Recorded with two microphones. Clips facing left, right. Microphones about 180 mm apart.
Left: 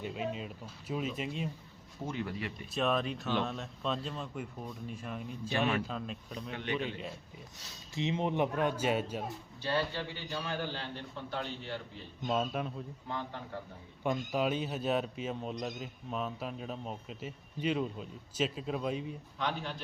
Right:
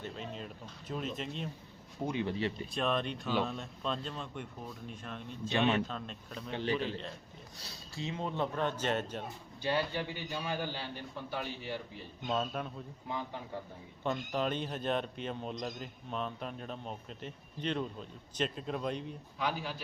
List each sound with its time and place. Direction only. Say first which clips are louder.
0.0 s speech: left 5 dB; 10° left (ahead or behind)
2.0 s speech: right 4 dB; 25° right (ahead or behind)
2.7 s a man's voice: left 4 dB; centre (ahead or behind)
5.5 s speech: right 2 dB; 25° right (ahead or behind)
5.8 s speech: left 1 dB; 5° left (ahead or behind)
6.5 s a man's voice: right 4 dB; 30° right (ahead or behind)
7.9 s speech: left 5 dB; 20° left (ahead or behind)
9.6 s a man's voice: right 1 dB; 15° right (ahead or behind)
12.3 s a man's voice: left 2 dB; 5° left (ahead or behind)
14.0 s a man's voice: left 2 dB; 10° left (ahead or behind)